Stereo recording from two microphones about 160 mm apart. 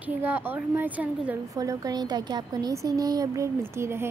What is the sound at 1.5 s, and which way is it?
A woman's voice, 20° right (ahead or behind).